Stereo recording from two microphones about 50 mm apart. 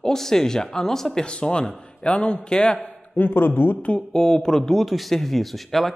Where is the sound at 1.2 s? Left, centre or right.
Centre.